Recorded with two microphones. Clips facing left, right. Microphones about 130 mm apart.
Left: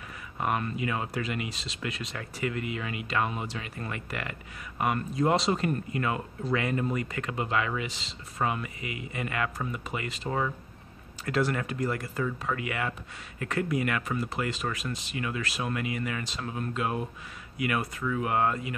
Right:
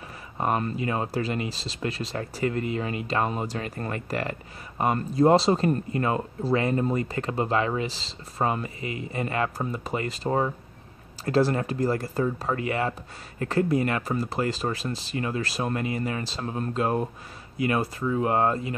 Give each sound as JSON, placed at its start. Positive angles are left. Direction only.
{"t": 0.4, "sound": "speech", "side_deg": -35}